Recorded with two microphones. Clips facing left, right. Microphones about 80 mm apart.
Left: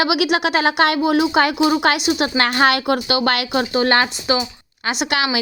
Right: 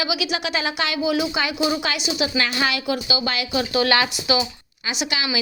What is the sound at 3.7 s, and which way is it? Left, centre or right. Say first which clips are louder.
Speech: left 2 dB; left.